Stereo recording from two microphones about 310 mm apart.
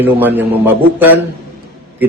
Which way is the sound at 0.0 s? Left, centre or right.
Centre.